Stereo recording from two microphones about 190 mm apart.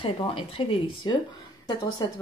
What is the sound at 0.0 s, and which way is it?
Speech, 30° left (ahead or behind).